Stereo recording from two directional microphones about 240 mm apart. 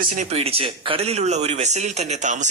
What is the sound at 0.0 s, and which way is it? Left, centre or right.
Speech, right.